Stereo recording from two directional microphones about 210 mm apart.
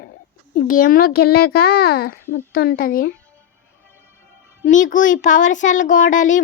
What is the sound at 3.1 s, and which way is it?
Music, 10° left (ahead or behind).